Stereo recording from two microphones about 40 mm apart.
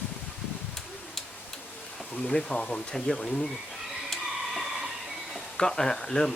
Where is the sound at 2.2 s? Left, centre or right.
Left.